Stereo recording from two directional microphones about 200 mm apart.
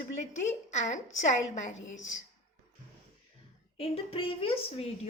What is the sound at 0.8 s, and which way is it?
Speech, 35° left (ahead or behind).